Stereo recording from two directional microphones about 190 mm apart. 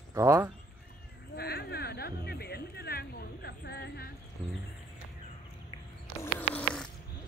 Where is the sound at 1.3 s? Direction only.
55° left (ahead or behind).